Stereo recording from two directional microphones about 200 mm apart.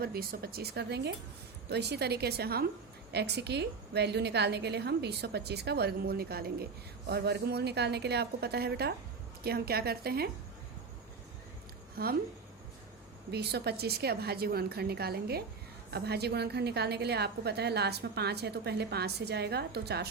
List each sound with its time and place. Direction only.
0.0 s a woman's voice: 50° right (ahead or behind)
12.0 s a woman's voice: 50° right (ahead or behind)
13.3 s a woman's voice: 55° right (ahead or behind)